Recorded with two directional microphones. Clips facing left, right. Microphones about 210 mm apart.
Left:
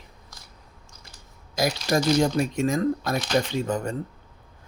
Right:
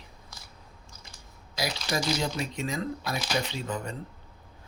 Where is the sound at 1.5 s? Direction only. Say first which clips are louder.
Left 7 dB; 50° left (ahead or behind).